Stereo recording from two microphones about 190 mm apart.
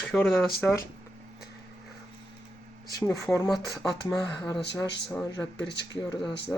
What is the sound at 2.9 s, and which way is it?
Speech, 15° left (ahead or behind).